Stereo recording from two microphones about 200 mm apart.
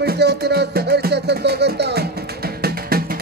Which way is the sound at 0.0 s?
55° right (ahead or behind).